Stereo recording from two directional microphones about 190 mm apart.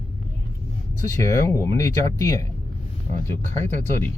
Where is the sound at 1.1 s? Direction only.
15° left (ahead or behind).